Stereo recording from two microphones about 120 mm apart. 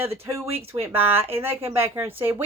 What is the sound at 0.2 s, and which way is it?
Speech, 25° right (ahead or behind).